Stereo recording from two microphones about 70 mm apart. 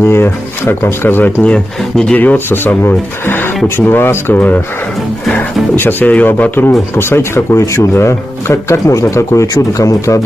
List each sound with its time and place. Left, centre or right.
0.0 s speech: left
1.4 s speech: centre
2.1 s speech: left
5.8 s speech: left